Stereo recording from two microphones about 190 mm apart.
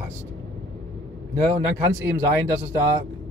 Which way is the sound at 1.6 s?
15° right (ahead or behind).